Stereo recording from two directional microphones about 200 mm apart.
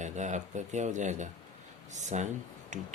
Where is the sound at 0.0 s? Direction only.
35° right (ahead or behind).